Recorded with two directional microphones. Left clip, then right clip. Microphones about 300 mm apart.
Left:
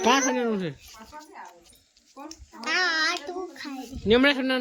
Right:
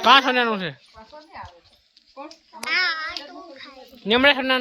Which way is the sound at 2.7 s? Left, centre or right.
Left.